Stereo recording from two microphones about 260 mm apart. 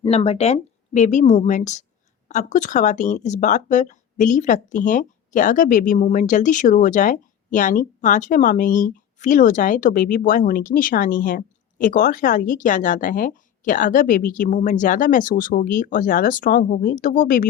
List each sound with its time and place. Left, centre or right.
0.0 s speech: left